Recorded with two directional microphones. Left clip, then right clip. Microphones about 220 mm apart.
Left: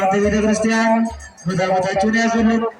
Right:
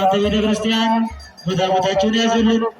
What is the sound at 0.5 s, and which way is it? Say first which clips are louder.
Music: left 1 dB; 45° right (ahead or behind).